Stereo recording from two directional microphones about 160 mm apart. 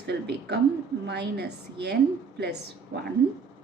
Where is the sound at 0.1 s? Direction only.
90° right.